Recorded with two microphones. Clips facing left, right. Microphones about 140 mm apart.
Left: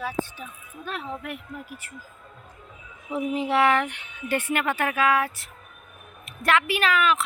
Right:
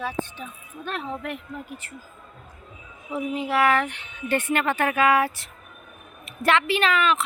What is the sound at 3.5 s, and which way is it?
Speech, 20° left (ahead or behind).